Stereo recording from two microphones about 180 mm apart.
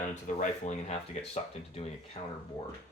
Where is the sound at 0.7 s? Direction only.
40° left (ahead or behind).